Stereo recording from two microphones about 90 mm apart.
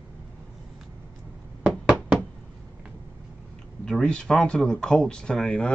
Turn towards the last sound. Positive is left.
turn(degrees=10)  # may be behind; listen again after turning